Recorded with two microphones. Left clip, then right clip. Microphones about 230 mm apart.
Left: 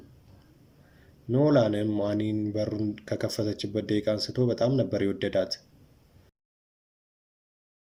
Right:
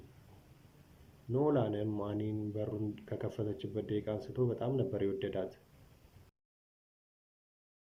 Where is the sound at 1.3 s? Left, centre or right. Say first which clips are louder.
Left 9 dB; left.